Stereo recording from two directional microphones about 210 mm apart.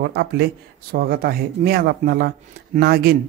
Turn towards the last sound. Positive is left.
turn(degrees=-45)  # may be behind; listen again after turning